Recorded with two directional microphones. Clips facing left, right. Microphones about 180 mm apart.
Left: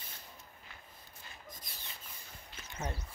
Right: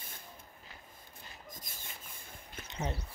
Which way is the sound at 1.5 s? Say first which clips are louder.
Right 2 dB; 45° right (ahead or behind).